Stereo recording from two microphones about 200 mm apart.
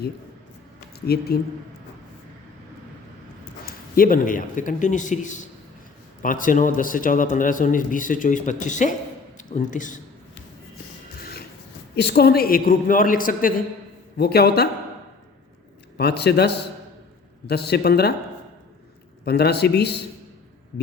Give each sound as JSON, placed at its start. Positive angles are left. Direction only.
{"t": 1.0, "sound": "a man's voice", "side_deg": 50}
{"t": 3.7, "sound": "a man's voice", "side_deg": 45}
{"t": 11.9, "sound": "a man's voice", "side_deg": 55}
{"t": 16.0, "sound": "a man's voice", "side_deg": 55}
{"t": 19.2, "sound": "speech", "side_deg": 55}